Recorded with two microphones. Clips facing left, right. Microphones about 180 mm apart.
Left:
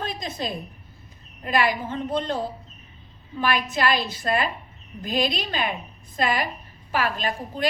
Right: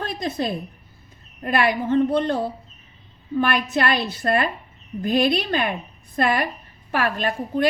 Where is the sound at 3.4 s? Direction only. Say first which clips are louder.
Right 1 dB; 60° right (ahead or behind).